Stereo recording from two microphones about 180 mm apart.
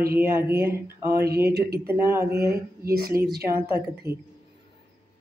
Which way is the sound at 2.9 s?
55° right (ahead or behind).